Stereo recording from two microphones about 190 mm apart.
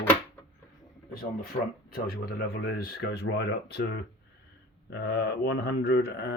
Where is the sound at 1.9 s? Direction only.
55° left (ahead or behind).